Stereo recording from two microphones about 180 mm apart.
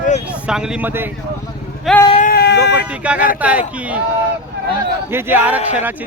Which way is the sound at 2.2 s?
55° left (ahead or behind).